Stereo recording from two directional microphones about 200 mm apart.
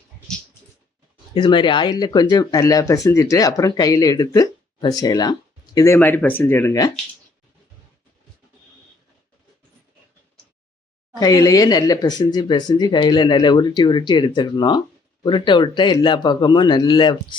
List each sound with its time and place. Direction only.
1.3 s speech: 25° left (ahead or behind)
11.2 s speech: 20° left (ahead or behind)